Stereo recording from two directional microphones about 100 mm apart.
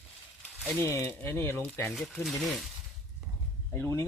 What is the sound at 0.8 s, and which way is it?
Speech, 25° left (ahead or behind).